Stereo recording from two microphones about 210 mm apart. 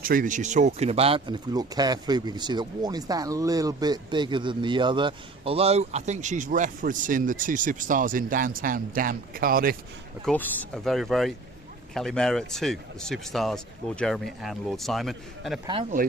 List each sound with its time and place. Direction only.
0.0 s speech: 40° right (ahead or behind)
10.2 s speech: 5° left (ahead or behind)
15.6 s speech: 25° right (ahead or behind)